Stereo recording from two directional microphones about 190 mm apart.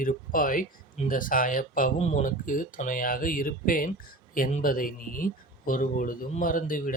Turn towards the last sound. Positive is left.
turn(degrees=45)  # may be behind; listen again after turning